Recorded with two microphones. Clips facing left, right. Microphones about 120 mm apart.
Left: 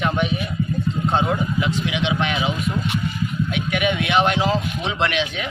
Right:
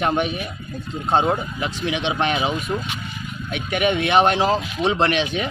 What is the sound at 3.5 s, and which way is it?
A man's voice, 40° right (ahead or behind).